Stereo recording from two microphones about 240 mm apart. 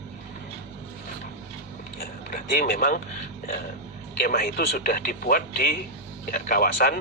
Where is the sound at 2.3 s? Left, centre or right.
Left.